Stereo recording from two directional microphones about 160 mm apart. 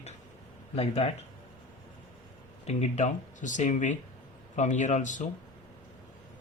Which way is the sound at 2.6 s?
45° left (ahead or behind).